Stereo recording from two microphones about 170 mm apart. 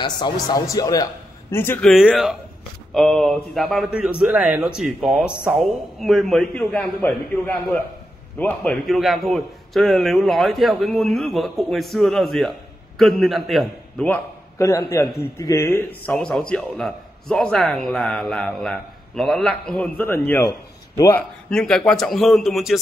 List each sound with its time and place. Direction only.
0.0 s speech: 25° left (ahead or behind)
1.9 s a man's voice: centre (ahead or behind); by 15.8 s 15° left (ahead or behind)
16.1 s a man's voice: 5° left (ahead or behind)
21.5 s a man's voice: 5° left (ahead or behind)